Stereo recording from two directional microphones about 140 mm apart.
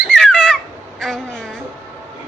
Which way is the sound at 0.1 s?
5° left (ahead or behind).